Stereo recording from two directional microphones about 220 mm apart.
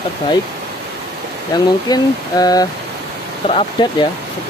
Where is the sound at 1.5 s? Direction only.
20° left (ahead or behind).